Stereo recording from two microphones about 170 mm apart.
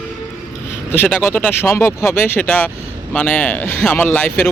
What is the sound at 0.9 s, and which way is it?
Speech, 10° left (ahead or behind).